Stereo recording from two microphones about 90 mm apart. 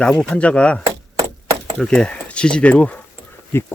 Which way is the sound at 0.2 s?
15° left (ahead or behind).